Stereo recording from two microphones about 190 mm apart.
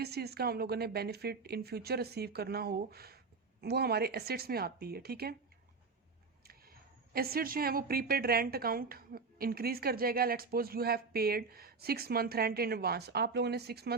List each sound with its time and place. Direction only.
0.0 s a woman's voice: 55° right (ahead or behind)
6.4 s speech: 55° right (ahead or behind)